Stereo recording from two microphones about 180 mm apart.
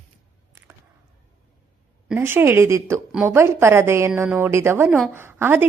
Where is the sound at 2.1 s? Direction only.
10° right (ahead or behind).